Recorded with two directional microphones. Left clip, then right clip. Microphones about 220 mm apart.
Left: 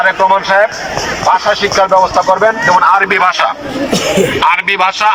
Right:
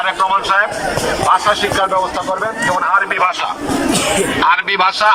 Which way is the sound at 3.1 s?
45° left (ahead or behind).